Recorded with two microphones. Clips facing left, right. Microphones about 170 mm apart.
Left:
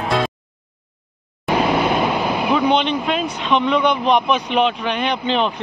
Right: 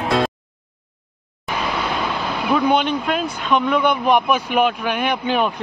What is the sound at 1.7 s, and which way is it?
Vehicle, 25° left (ahead or behind).